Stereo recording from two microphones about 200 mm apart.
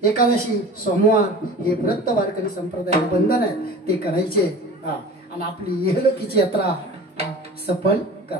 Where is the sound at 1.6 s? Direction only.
45° left (ahead or behind).